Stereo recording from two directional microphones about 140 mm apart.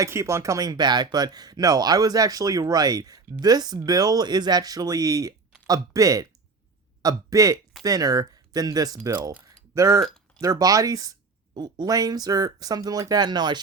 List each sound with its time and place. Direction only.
0.0 s speech: 20° right (ahead or behind)
10.0 s a sound: 5° left (ahead or behind)
10.4 s speech: 25° right (ahead or behind)